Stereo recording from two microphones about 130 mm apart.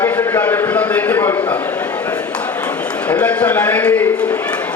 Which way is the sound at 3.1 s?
10° left (ahead or behind).